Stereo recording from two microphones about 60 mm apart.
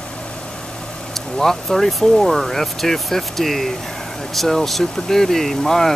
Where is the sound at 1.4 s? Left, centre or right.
Centre.